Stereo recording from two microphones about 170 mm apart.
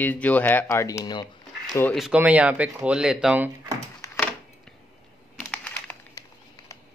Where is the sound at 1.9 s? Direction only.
5° right (ahead or behind).